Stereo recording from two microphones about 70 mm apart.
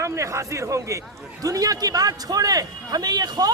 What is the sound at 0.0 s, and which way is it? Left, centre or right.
A man's voice, right.